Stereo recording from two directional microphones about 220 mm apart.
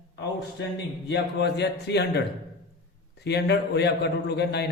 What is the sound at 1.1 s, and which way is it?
A man's voice, 50° left (ahead or behind).